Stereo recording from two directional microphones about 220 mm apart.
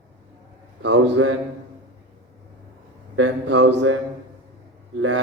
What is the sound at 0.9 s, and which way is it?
Speech, 75° right (ahead or behind).